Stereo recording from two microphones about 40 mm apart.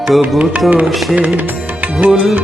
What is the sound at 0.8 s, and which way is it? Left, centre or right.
Music, centre.